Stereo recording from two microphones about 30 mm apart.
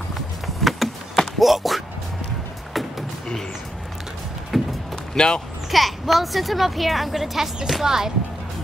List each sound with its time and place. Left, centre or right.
0.6 s a sound: centre
1.4 s a woman's voice: centre
2.7 s vehicle: centre
4.5 s a sound: centre
5.1 s speech: left
5.7 s a woman's voice: centre